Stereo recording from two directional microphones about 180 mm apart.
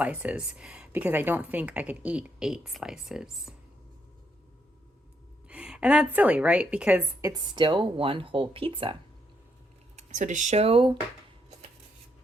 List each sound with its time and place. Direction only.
0.0 s speech: 5° right (ahead or behind)
5.5 s speech: 5° right (ahead or behind); by 9.0 s 30° right (ahead or behind)
9.9 s speech: 40° right (ahead or behind)